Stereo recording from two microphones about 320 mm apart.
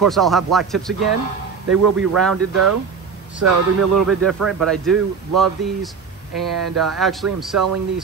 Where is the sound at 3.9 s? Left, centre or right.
Centre.